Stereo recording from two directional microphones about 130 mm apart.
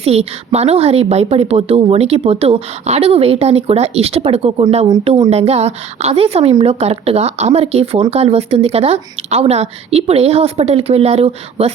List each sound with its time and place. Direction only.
0.0 s a woman's voice: 50° right (ahead or behind)